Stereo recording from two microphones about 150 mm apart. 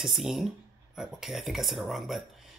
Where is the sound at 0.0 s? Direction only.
Centre (ahead or behind).